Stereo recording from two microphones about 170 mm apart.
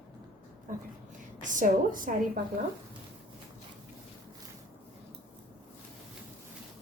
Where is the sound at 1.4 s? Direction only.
50° right (ahead or behind).